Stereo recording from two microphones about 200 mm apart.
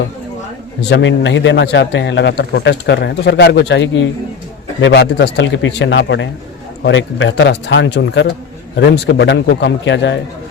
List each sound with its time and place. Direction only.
0.8 s a man's voice: 60° left (ahead or behind)